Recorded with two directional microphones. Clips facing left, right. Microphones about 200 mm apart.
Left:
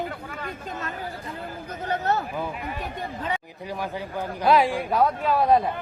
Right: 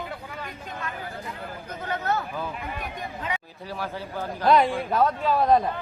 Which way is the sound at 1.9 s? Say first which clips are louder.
Left 2 dB; 35° left (ahead or behind).